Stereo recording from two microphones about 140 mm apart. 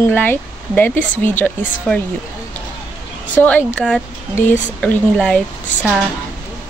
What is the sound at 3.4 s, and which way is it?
A woman's voice, 10° left (ahead or behind).